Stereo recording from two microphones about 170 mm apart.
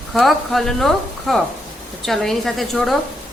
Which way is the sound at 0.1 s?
Centre (ahead or behind).